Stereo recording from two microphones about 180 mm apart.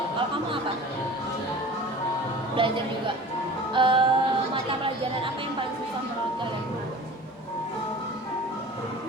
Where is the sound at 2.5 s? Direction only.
30° right (ahead or behind).